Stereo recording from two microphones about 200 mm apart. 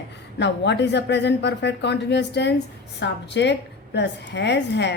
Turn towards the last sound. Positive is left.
turn(degrees=60)  # may be behind; listen again after turning